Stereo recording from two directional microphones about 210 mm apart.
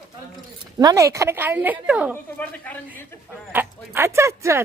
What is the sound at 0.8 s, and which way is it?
A woman's voice, 15° right (ahead or behind).